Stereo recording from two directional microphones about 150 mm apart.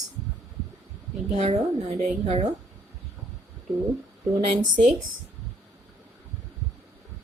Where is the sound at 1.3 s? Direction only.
50° right (ahead or behind).